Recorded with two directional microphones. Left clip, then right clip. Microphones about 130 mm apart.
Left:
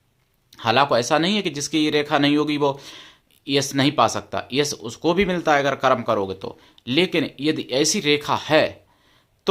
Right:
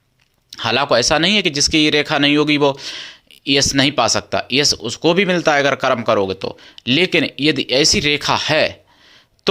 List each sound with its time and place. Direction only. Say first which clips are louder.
0.5 s speech: right 2 dB; 25° right (ahead or behind)